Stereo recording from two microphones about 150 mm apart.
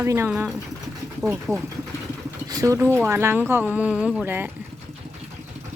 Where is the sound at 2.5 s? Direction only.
25° right (ahead or behind).